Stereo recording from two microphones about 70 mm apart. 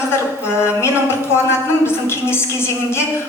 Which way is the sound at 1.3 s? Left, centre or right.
Left.